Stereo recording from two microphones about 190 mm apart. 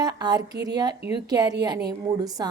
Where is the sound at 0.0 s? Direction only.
20° right (ahead or behind).